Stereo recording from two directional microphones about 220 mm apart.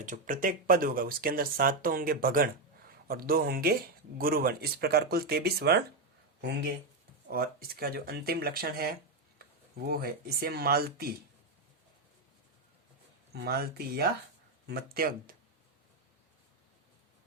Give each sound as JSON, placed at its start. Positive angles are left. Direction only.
{"t": 0.0, "sound": "speech", "side_deg": -35}
{"t": 7.3, "sound": "speech", "side_deg": -45}
{"t": 13.3, "sound": "speech", "side_deg": -45}